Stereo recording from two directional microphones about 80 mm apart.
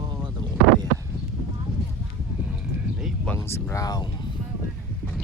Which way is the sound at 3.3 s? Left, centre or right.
Left.